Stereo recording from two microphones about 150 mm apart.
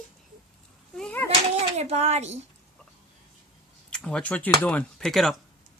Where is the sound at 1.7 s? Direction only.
45° right (ahead or behind).